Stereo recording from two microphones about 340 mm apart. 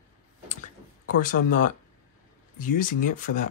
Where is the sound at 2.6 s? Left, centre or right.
Left.